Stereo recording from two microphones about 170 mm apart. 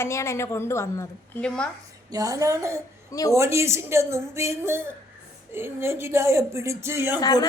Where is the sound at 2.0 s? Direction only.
20° right (ahead or behind).